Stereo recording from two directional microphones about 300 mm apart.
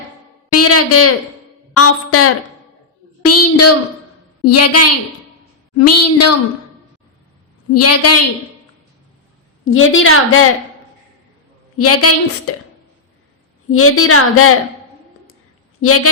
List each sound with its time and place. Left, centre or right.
0.5 s a sound: left
1.7 s a woman's voice: left
7.7 s a woman's voice: left
9.6 s a woman's voice: left
11.8 s a woman's voice: left
13.7 s a woman's voice: left
15.8 s a woman's voice: left